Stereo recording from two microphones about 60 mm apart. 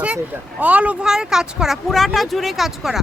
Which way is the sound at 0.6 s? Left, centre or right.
Right.